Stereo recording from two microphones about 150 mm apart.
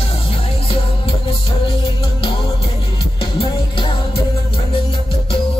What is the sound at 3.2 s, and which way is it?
Music, 35° left (ahead or behind).